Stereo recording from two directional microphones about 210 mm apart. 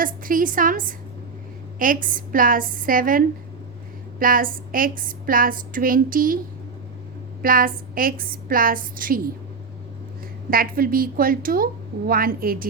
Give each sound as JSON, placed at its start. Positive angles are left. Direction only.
{"t": 0.0, "sound": "a woman's voice", "side_deg": -40}
{"t": 7.4, "sound": "a woman's voice", "side_deg": -45}
{"t": 10.5, "sound": "a woman's voice", "side_deg": -45}